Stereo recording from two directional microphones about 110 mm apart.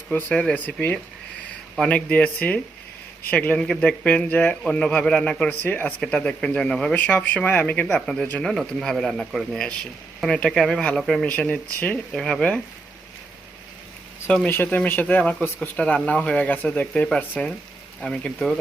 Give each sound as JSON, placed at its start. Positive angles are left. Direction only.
{"t": 0.1, "sound": "speech", "side_deg": 15}
{"t": 7.9, "sound": "speech", "side_deg": 5}
{"t": 14.3, "sound": "speech", "side_deg": 15}